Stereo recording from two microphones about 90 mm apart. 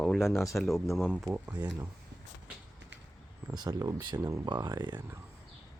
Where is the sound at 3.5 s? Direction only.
45° right (ahead or behind).